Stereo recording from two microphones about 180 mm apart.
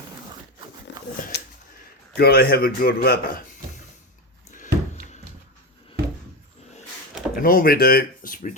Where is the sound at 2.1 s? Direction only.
60° left (ahead or behind).